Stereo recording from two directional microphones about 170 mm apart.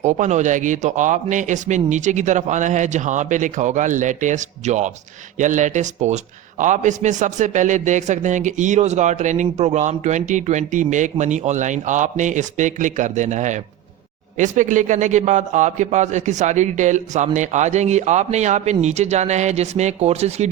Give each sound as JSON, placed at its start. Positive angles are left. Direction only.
{"t": 0.0, "sound": "a man's voice", "side_deg": -45}